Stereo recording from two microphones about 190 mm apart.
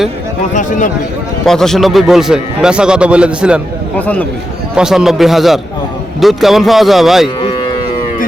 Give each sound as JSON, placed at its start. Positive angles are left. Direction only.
{"t": 0.5, "sound": "speech", "side_deg": 40}
{"t": 1.5, "sound": "a man's voice", "side_deg": 0}
{"t": 3.9, "sound": "speech", "side_deg": 10}
{"t": 4.7, "sound": "a man's voice", "side_deg": -5}
{"t": 7.3, "sound": "moo", "side_deg": 25}